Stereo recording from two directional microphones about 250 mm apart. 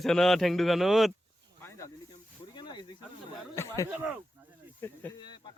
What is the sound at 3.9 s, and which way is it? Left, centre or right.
Speech, centre.